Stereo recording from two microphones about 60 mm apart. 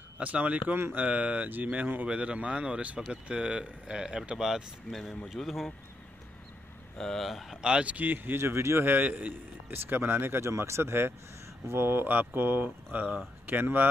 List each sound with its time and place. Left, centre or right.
0.2 s speech: right
0.7 s a man's voice: right
1.0 s speech: right; by 5.7 s centre
7.0 s speech: centre
7.6 s a man's voice: centre; by 8.8 s right
8.8 s a man's voice: right